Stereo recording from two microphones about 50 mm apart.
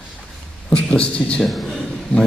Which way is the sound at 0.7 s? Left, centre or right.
Left.